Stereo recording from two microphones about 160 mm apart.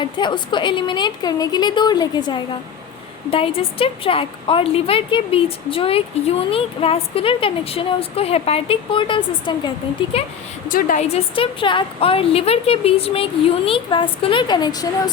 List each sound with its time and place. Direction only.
0.0 s a woman's voice: 30° left (ahead or behind)
10.7 s a woman's voice: 60° left (ahead or behind)
11.1 s a woman's voice: 30° left (ahead or behind)